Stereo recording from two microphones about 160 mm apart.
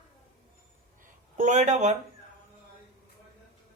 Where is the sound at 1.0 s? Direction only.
50° right (ahead or behind).